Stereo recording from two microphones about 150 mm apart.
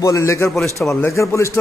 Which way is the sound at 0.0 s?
20° left (ahead or behind).